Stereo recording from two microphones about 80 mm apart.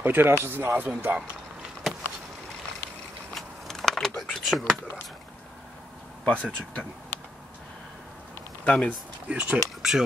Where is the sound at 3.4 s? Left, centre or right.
Centre.